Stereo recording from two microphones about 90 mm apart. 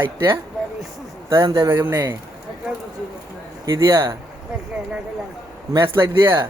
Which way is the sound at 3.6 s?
45° right (ahead or behind).